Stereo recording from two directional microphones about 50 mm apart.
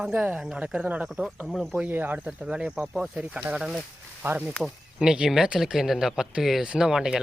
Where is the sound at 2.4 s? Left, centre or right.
Right.